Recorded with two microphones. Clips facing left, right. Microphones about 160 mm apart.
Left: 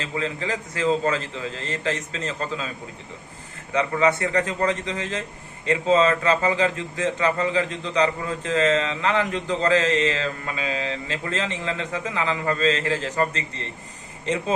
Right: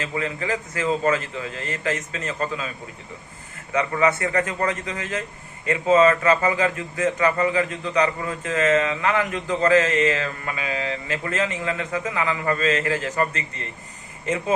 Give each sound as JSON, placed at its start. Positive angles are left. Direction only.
{"t": 0.0, "sound": "mantra", "side_deg": 25}
{"t": 3.8, "sound": "mantra", "side_deg": 25}